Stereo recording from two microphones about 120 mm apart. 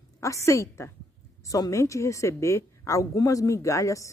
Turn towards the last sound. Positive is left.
turn(degrees=25)  # may be behind; listen again after turning